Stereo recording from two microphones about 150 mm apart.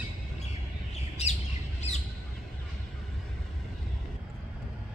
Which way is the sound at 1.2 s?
45° left (ahead or behind).